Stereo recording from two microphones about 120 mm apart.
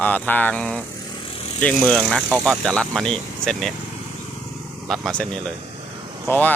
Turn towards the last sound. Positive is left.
turn(degrees=15)  # may be behind; listen again after turning